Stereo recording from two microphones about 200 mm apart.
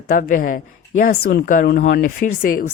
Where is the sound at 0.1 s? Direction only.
40° left (ahead or behind).